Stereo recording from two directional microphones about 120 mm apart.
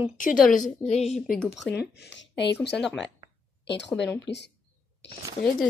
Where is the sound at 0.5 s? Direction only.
80° left.